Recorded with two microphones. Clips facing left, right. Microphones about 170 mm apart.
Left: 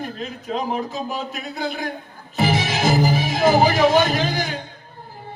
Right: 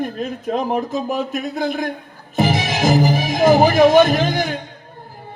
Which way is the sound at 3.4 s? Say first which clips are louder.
Right 4 dB; 45° right (ahead or behind).